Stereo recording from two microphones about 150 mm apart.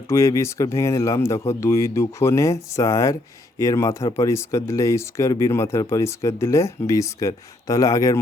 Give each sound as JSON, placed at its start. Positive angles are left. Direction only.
{"t": 0.1, "sound": "speech", "side_deg": 20}